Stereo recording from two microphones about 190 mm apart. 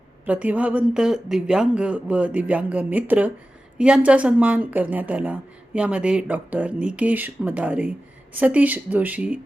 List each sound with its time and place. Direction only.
0.3 s speech: 5° right (ahead or behind)